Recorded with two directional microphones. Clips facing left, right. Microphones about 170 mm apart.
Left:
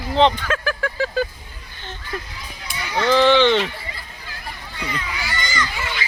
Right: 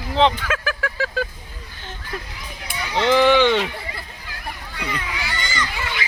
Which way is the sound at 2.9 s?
15° right (ahead or behind).